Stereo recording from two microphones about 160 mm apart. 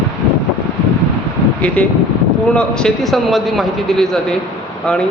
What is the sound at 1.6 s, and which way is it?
Speech, 10° left (ahead or behind).